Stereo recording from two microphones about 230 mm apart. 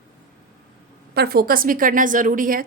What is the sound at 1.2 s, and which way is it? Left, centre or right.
A woman's voice, right.